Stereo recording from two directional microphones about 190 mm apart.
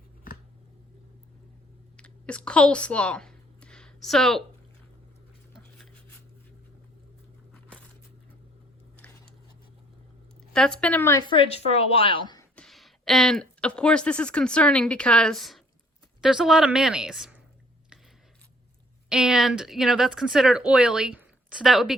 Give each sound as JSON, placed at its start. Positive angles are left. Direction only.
{"t": 2.0, "sound": "a sound", "side_deg": 5}
{"t": 5.5, "sound": "a sound", "side_deg": 5}
{"t": 10.5, "sound": "speech", "side_deg": 5}
{"t": 11.3, "sound": "a woman's voice", "side_deg": 30}
{"t": 12.5, "sound": "speech", "side_deg": 0}
{"t": 19.0, "sound": "speech", "side_deg": -5}